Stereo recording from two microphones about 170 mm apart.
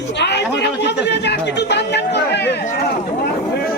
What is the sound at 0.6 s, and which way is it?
Chatter, 90° left.